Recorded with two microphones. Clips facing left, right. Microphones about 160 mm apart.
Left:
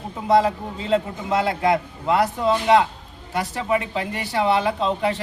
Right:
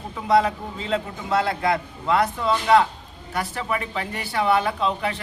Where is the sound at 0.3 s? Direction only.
25° left (ahead or behind).